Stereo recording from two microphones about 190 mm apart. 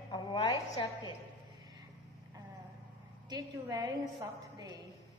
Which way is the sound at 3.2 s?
20° right (ahead or behind).